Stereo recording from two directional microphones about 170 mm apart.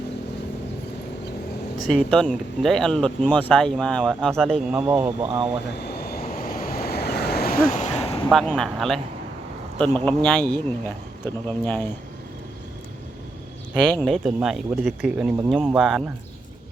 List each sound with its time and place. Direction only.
1.8 s speech: 5° left (ahead or behind)
4.8 s speech: 10° right (ahead or behind)
5.2 s speech: 30° right (ahead or behind)
5.8 s waves: 65° left (ahead or behind); by 8.3 s 35° left (ahead or behind)
8.3 s speech: centre (ahead or behind)
13.9 s speech: centre (ahead or behind)